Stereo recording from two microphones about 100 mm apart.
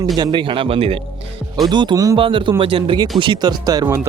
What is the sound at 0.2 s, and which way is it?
Speech, 50° right (ahead or behind).